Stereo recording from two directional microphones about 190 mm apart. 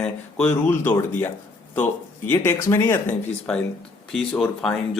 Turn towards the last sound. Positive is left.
turn(degrees=0)  # may be behind; listen again after turning